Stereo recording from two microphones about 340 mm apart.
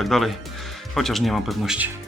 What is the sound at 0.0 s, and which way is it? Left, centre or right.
Speech, centre.